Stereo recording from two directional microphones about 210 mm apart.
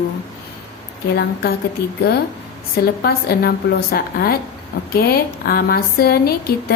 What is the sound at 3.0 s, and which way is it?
A woman's voice, 50° left (ahead or behind).